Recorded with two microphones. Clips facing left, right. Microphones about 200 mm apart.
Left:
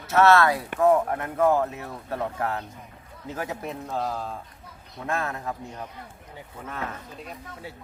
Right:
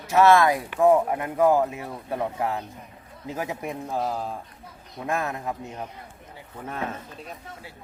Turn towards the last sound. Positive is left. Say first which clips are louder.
# right 3 dB
turn(degrees=-25)  # may be behind; listen again after turning